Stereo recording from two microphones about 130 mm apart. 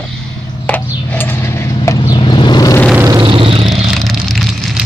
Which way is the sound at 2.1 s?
40° left (ahead or behind).